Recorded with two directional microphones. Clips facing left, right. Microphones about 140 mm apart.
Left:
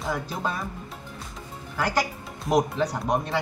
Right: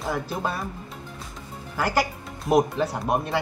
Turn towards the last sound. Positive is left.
turn(degrees=-5)  # may be behind; listen again after turning